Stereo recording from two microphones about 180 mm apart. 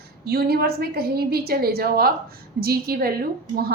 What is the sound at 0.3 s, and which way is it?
A woman's voice, 60° right (ahead or behind).